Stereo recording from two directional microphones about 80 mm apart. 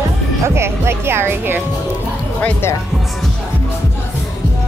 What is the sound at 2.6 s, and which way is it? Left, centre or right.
Speech, left.